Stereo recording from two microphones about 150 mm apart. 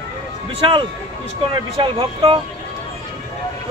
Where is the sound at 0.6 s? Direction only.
35° right (ahead or behind).